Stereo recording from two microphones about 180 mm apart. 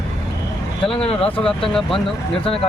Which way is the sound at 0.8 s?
30° left (ahead or behind).